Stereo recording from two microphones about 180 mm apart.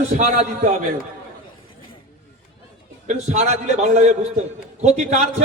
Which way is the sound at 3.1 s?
40° right (ahead or behind).